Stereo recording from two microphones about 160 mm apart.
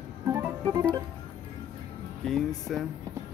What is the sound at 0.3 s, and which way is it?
Organ, 20° right (ahead or behind).